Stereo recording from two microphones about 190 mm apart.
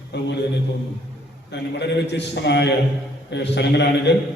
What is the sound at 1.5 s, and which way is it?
A man's voice, 65° left (ahead or behind).